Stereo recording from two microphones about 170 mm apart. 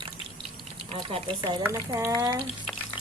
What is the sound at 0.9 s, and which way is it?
Speech, 30° right (ahead or behind).